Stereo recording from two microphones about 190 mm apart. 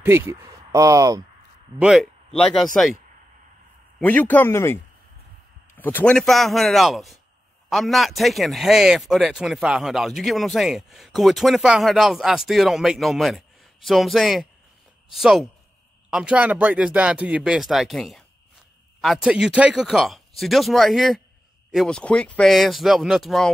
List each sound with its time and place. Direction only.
0.0 s speech: 10° right (ahead or behind)
1.8 s speech: 5° right (ahead or behind)
4.0 s a man's voice: 10° left (ahead or behind)
5.8 s speech: 10° left (ahead or behind)